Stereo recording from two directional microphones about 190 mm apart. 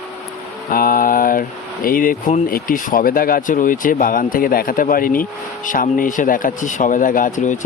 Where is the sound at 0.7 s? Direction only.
50° left (ahead or behind).